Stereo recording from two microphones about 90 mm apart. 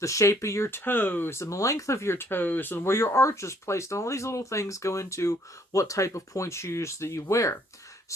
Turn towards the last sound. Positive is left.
turn(degrees=35)  # may be behind; listen again after turning